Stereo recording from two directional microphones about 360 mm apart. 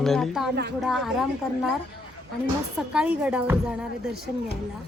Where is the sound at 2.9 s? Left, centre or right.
Centre.